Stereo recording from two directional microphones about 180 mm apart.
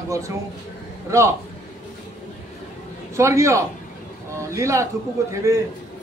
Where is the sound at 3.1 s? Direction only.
15° right (ahead or behind).